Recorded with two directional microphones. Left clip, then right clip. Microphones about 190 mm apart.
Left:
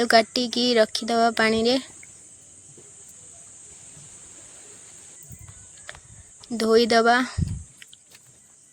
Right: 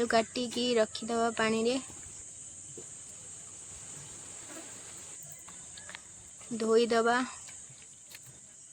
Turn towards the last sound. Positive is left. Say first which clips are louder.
# left 9 dB
turn(degrees=30)  # may be behind; listen again after turning